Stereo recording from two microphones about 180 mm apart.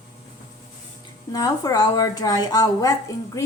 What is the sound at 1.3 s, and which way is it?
A woman's voice, 20° left (ahead or behind).